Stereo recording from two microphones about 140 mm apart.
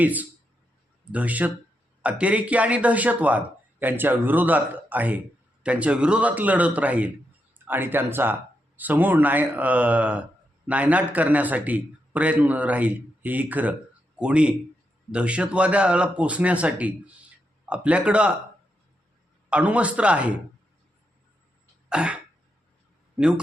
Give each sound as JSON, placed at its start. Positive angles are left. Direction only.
{"t": 0.0, "sound": "a man's voice", "side_deg": -10}
{"t": 19.5, "sound": "a man's voice", "side_deg": -10}
{"t": 21.8, "sound": "throat clearing", "side_deg": -5}